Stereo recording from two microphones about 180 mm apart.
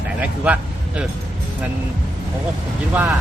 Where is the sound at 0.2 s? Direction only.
10° right (ahead or behind).